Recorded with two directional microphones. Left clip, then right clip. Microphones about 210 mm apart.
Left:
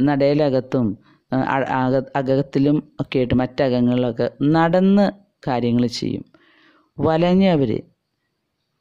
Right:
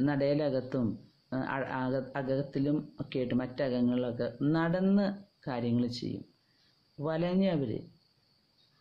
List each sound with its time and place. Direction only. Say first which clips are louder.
0.0 s speech: left 12 dB; 50° left (ahead or behind)